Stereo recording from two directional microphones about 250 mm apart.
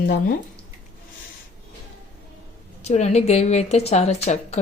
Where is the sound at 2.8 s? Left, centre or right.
Left.